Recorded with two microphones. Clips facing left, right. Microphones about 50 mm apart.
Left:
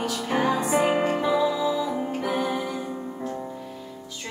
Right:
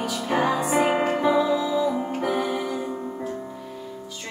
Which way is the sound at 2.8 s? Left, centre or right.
Centre.